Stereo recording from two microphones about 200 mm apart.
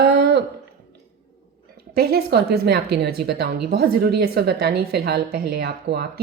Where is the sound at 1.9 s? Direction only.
50° right (ahead or behind).